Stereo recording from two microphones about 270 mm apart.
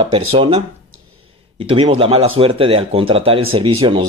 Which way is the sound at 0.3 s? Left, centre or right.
Right.